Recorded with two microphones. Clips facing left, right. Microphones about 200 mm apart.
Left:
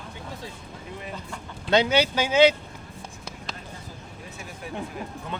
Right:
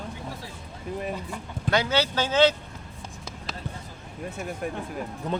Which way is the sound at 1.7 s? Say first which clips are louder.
Left 4 dB; 15° left (ahead or behind).